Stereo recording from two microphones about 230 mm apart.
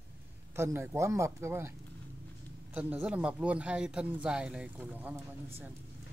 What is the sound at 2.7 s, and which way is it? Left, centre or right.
Speech, centre.